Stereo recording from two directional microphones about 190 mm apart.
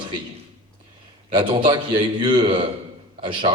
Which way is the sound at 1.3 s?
25° right (ahead or behind).